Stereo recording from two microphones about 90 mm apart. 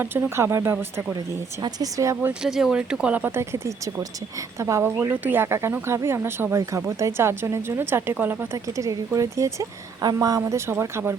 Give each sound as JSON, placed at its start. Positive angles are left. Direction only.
{"t": 0.0, "sound": "speech", "side_deg": -25}
{"t": 1.6, "sound": "speech", "side_deg": -40}
{"t": 2.4, "sound": "speech", "side_deg": -5}
{"t": 3.3, "sound": "speech", "side_deg": -25}
{"t": 10.0, "sound": "speech", "side_deg": -45}